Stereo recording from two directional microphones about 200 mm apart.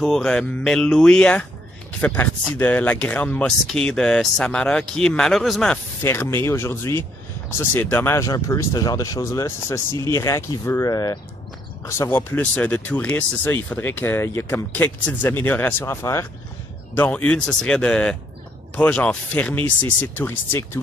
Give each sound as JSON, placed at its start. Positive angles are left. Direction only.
{"t": 0.0, "sound": "speech", "side_deg": 5}
{"t": 6.0, "sound": "speech", "side_deg": 10}